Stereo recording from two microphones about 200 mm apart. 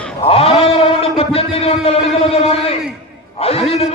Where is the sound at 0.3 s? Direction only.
30° left (ahead or behind).